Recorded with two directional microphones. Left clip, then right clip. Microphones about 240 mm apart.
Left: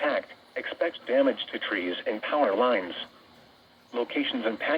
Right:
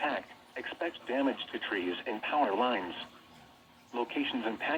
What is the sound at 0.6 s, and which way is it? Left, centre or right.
Speech, centre.